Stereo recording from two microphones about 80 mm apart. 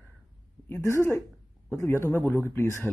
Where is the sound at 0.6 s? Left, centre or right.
Left.